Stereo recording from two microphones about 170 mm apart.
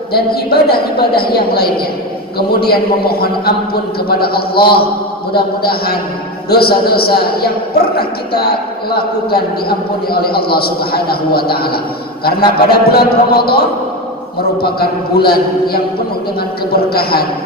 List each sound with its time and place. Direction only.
0.1 s a man's voice: 65° left (ahead or behind)
14.6 s a man's voice: 65° left (ahead or behind)